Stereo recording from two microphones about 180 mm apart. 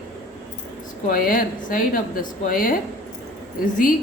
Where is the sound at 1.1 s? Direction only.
50° left (ahead or behind).